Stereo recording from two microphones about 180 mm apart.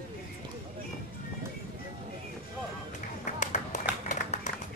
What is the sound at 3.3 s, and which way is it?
Run, 45° left (ahead or behind).